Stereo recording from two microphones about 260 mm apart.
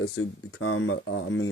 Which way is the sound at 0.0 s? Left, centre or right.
Left.